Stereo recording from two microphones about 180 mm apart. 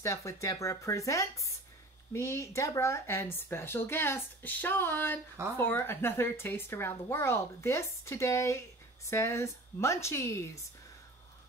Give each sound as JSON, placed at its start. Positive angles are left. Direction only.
{"t": 0.0, "sound": "speech", "side_deg": 15}